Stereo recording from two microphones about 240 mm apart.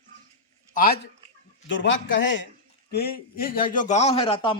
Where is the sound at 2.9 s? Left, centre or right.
Left.